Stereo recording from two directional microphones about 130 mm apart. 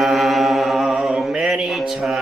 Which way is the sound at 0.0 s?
Centre (ahead or behind).